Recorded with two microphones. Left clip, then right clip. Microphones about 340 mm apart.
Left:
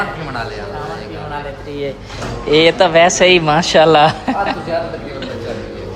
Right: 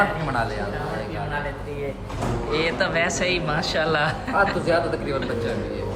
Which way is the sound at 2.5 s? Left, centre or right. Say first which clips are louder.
Left 14 dB; centre.